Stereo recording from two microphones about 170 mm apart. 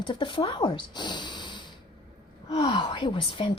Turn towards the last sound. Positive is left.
turn(degrees=30)  # may be behind; listen again after turning